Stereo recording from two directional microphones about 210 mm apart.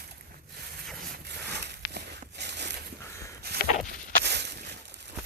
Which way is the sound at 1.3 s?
50° right (ahead or behind).